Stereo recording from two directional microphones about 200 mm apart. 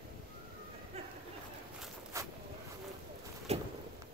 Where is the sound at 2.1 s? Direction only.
15° right (ahead or behind).